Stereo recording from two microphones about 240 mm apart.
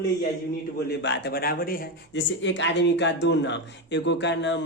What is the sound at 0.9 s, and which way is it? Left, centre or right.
Speech, left.